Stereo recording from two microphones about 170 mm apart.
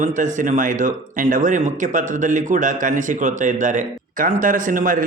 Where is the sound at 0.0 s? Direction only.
50° right (ahead or behind).